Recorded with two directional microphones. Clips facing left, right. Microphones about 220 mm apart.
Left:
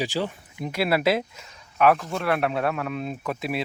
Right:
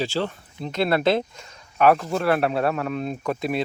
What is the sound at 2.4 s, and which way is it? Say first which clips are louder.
Speech: right 3 dB; 30° right (ahead or behind).